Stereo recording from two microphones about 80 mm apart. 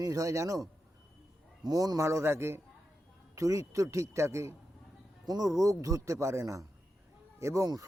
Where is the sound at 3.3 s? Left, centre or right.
Right.